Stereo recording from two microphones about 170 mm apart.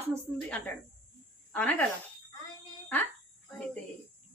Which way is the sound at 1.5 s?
10° left (ahead or behind).